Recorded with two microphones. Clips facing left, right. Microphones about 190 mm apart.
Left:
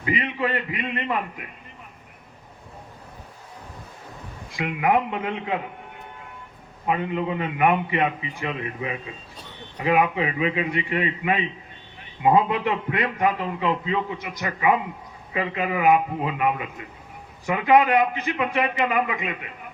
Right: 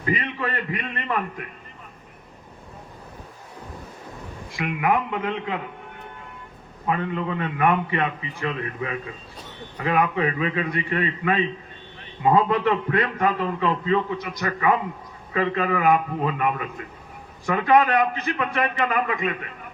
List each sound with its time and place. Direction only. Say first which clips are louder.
0.2 s a man's voice: left 3 dB; 15° left (ahead or behind)
4.5 s a man's voice: left 1 dB; 25° left (ahead or behind)
6.8 s a man's voice: left 1 dB; 20° left (ahead or behind)